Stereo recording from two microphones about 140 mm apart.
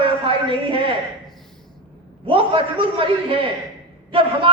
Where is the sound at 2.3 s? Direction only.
40° right (ahead or behind).